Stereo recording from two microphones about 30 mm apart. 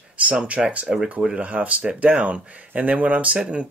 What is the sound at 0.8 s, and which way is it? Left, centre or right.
Speech, centre.